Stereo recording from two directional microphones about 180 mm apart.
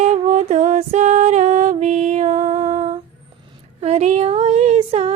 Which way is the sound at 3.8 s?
35° right (ahead or behind).